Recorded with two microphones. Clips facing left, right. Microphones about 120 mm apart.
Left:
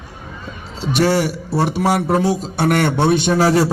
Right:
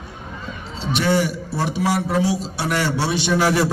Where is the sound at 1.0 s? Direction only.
45° left (ahead or behind).